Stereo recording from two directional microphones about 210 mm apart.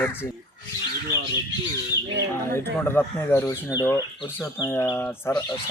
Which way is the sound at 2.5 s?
10° left (ahead or behind).